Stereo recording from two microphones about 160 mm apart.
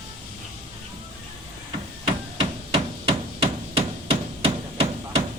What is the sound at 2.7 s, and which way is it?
Hammer, 35° right (ahead or behind).